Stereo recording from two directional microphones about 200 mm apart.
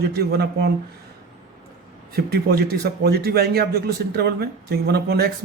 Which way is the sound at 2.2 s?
50° right (ahead or behind).